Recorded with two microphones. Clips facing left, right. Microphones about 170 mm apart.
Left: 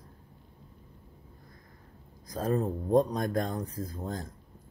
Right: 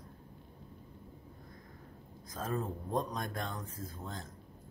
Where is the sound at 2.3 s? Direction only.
40° left (ahead or behind).